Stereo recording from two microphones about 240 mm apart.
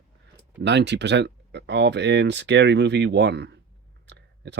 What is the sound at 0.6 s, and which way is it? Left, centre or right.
Speech, right.